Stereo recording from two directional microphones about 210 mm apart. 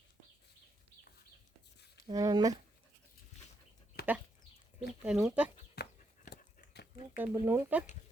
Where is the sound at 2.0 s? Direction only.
15° right (ahead or behind).